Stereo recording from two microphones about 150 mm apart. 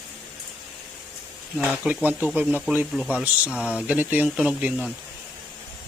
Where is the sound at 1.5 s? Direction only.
5° right (ahead or behind).